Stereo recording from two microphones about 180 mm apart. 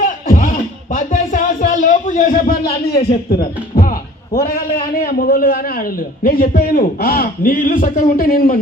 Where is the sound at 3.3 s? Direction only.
55° left (ahead or behind).